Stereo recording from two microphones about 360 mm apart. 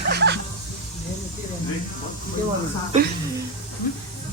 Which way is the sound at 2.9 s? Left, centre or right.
Centre.